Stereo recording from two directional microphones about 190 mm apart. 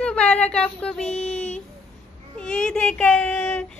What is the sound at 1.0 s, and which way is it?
Child singing, 35° left (ahead or behind).